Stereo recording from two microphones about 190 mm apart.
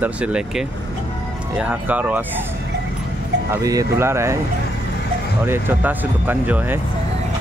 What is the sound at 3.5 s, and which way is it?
Speech, 20° right (ahead or behind).